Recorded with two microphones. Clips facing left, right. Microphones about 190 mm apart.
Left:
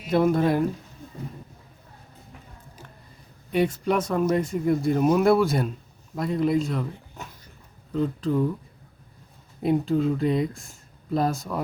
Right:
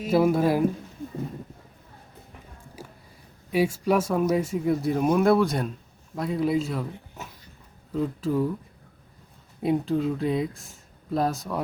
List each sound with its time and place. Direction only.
0.1 s speech: 5° right (ahead or behind)
3.5 s speech: 5° right (ahead or behind)
9.6 s speech: centre (ahead or behind)